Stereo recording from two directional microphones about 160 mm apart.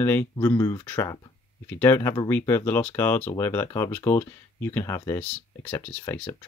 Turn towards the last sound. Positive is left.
turn(degrees=10)  # may be behind; listen again after turning